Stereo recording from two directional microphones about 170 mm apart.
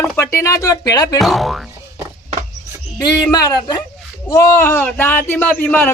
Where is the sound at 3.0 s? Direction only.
20° left (ahead or behind).